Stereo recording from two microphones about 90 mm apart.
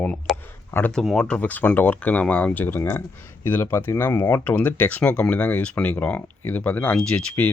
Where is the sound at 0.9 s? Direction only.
5° left (ahead or behind).